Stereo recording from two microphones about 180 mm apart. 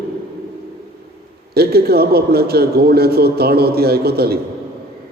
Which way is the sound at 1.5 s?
60° right (ahead or behind).